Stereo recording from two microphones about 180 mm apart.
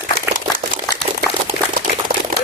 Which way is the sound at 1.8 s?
50° right (ahead or behind).